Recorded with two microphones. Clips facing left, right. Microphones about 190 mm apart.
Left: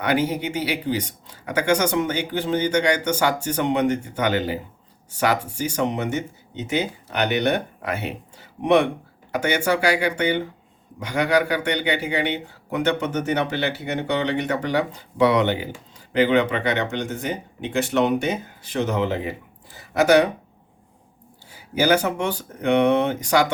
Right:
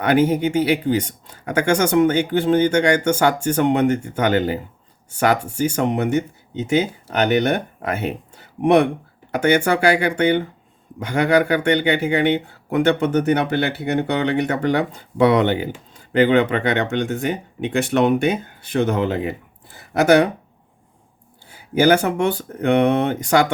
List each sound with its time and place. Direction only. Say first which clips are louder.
0.0 s speech: right 6 dB; 50° right (ahead or behind)
19.7 s a sound: right 2 dB; 55° right (ahead or behind)
21.5 s speech: right 4 dB; 55° right (ahead or behind)